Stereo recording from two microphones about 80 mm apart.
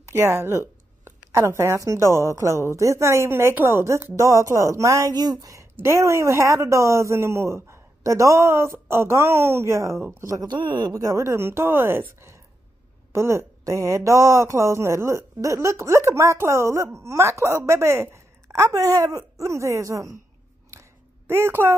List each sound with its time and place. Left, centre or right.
0.1 s speech: right
5.1 s speech: right
10.3 s speech: right
10.9 s speech: right
21.3 s a woman's voice: right